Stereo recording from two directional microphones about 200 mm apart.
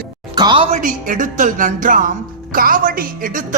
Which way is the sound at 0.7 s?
40° right (ahead or behind).